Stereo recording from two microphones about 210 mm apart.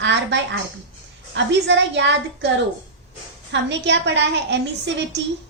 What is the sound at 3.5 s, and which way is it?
A woman's voice, 55° right (ahead or behind).